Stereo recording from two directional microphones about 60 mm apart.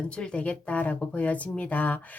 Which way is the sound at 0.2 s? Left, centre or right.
Centre.